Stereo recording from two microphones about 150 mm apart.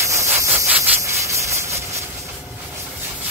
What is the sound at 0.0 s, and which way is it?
Sawing, 20° right (ahead or behind).